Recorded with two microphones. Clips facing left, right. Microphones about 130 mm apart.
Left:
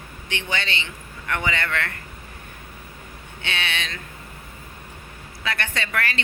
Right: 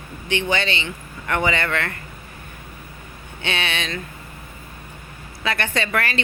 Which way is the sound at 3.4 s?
20° right (ahead or behind).